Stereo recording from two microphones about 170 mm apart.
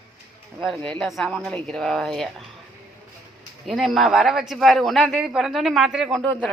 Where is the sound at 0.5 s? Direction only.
Centre (ahead or behind).